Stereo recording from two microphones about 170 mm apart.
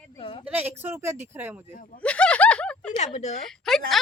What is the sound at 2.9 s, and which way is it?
Speech, 40° left (ahead or behind).